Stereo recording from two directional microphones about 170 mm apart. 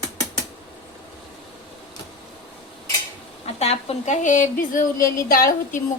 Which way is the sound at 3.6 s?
35° left (ahead or behind).